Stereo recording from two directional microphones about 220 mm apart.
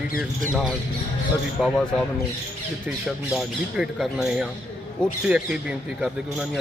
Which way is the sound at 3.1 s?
Centre (ahead or behind).